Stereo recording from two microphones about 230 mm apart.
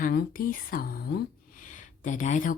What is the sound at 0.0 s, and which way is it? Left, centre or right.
Speech, left.